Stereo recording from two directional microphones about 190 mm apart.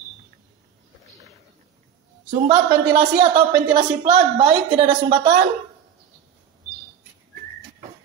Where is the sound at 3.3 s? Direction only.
25° right (ahead or behind).